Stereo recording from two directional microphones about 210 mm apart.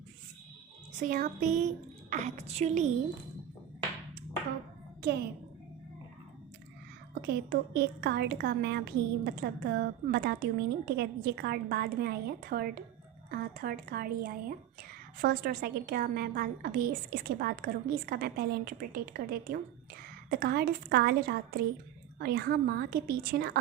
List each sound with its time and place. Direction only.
0.9 s a woman's voice: 40° right (ahead or behind)
7.1 s speech: 50° right (ahead or behind)